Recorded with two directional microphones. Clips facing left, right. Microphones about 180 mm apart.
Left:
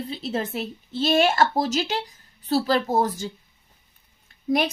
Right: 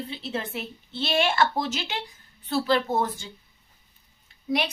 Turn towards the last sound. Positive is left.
turn(degrees=45)  # may be behind; listen again after turning